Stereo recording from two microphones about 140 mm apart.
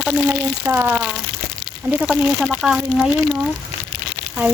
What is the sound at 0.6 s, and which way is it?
Speech, 15° right (ahead or behind).